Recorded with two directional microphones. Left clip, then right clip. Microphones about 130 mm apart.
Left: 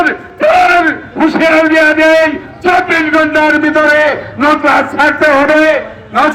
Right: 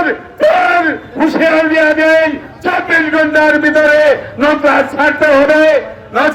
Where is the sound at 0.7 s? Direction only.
40° right (ahead or behind).